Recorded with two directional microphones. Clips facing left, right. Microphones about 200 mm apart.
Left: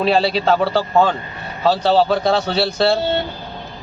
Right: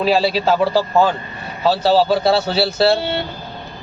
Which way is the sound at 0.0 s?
5° right (ahead or behind).